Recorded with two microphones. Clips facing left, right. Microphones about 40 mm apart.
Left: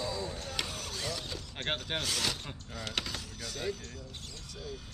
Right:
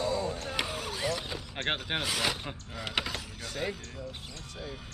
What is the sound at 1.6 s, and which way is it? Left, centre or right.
Speech, centre.